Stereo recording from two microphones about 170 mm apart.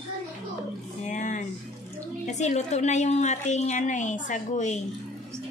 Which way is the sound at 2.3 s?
45° left (ahead or behind).